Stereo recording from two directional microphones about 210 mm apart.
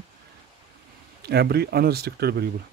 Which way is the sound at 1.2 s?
50° right (ahead or behind).